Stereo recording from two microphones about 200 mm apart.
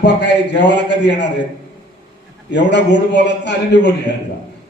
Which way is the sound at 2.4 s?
60° left (ahead or behind).